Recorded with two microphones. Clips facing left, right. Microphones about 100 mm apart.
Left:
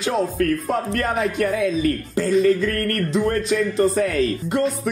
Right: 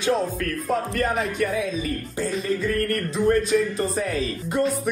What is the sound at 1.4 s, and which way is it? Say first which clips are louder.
Speech: left 5 dB; 90° left.